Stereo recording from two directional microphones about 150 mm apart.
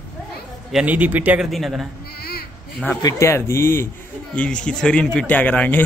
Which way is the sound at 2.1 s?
90° left.